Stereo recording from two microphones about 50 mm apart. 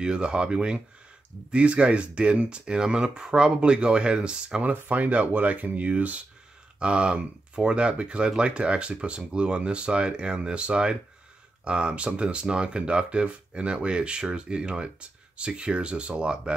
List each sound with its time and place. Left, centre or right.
0.0 s speech: centre
4.6 s speech: right